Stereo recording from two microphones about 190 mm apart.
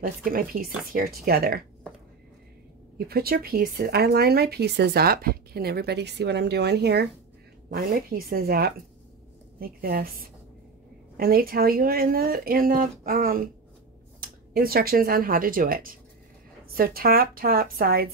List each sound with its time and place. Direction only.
0.0 s speech: 50° right (ahead or behind)
3.1 s speech: 55° right (ahead or behind)
14.5 s speech: 50° right (ahead or behind)